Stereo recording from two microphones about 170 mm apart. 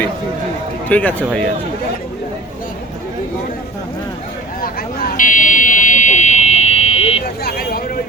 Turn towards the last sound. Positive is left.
turn(degrees=60)  # may be behind; listen again after turning